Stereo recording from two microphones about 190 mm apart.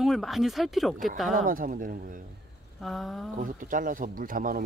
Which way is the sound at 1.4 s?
45° right (ahead or behind).